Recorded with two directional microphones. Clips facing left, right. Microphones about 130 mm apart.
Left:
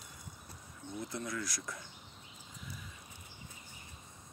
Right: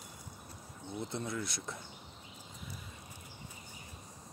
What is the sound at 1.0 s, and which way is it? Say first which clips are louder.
Speech: right 2 dB; 25° right (ahead or behind).